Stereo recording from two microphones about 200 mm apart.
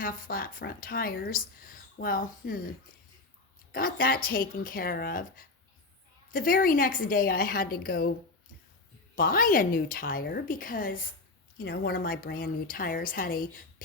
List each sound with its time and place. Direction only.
0.0 s a woman's voice: 50° left (ahead or behind)
3.7 s a woman's voice: 45° left (ahead or behind)
9.1 s a woman's voice: 45° left (ahead or behind)